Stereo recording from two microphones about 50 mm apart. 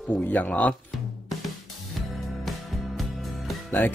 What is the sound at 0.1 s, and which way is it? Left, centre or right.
Speech, left.